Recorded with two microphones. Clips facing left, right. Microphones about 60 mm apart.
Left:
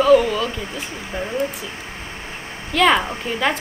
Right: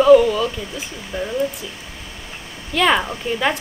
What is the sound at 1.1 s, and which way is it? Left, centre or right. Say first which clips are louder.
Speech: right 2 dB; left.